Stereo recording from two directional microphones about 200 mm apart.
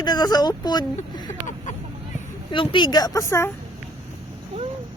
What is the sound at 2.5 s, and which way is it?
A woman's voice, 25° left (ahead or behind).